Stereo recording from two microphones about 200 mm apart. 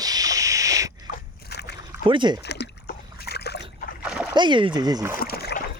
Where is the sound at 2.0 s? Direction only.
25° right (ahead or behind).